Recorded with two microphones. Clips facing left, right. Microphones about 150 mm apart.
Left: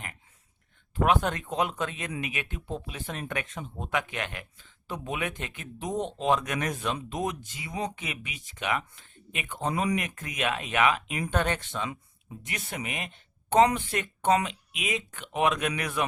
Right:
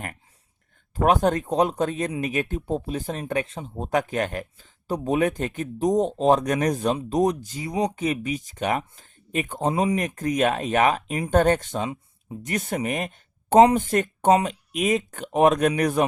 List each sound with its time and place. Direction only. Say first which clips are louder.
0.9 s speech: right 5 dB; 40° right (ahead or behind)